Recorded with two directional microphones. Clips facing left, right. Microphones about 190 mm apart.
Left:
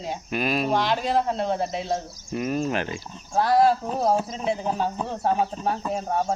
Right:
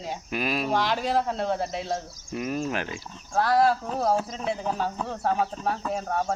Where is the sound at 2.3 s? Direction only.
Centre (ahead or behind).